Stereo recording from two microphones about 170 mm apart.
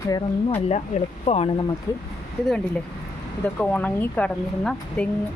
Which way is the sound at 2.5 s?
5° left (ahead or behind).